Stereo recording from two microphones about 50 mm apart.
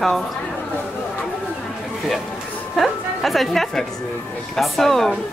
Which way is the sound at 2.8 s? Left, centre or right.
Centre.